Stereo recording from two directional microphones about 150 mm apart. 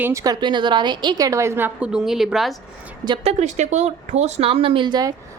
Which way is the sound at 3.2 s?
50° right (ahead or behind).